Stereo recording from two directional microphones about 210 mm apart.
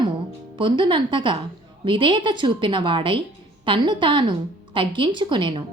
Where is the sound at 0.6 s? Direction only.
25° right (ahead or behind).